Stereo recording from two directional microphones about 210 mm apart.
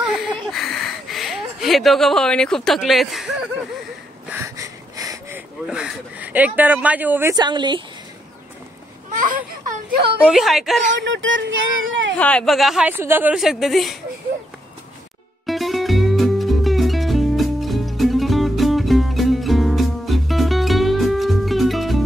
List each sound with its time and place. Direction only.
0.0 s a sound: 5° right (ahead or behind)
4.3 s a sound: 15° right (ahead or behind)
5.7 s speech: 5° right (ahead or behind); by 7.8 s 20° right (ahead or behind)
9.2 s speech: 40° right (ahead or behind)
10.2 s speech: centre (ahead or behind)
11.0 s speech: 60° right (ahead or behind)
12.2 s speech: 5° left (ahead or behind)
15.4 s music: centre (ahead or behind)